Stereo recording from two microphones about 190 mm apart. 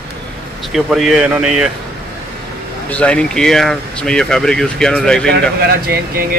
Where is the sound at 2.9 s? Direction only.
5° left (ahead or behind).